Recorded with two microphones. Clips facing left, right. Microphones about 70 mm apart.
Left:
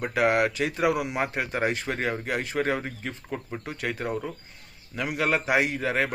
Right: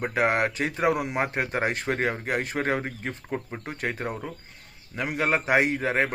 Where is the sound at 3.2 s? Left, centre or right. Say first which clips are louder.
Right 1 dB; right.